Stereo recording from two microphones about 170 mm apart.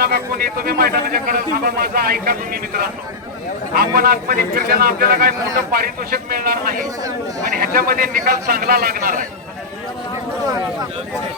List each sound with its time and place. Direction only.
0.0 s speech: 65° right (ahead or behind)